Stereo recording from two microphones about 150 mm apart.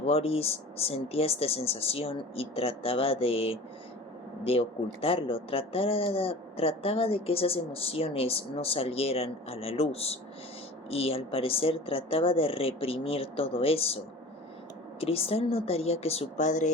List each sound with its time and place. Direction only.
0.0 s speech: 40° left (ahead or behind)
15.0 s speech: 40° left (ahead or behind)